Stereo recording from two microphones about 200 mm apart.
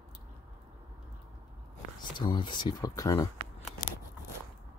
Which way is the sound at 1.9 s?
20° left (ahead or behind).